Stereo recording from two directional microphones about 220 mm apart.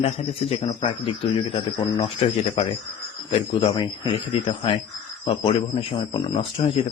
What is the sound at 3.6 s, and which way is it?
Speech, 20° left (ahead or behind).